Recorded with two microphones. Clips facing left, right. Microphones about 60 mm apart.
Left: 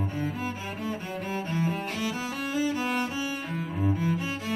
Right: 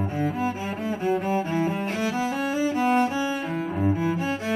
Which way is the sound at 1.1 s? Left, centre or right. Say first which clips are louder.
Right 9 dB; centre.